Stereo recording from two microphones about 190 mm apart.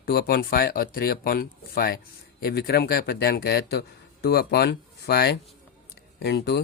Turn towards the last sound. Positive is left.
turn(degrees=60)  # may be behind; listen again after turning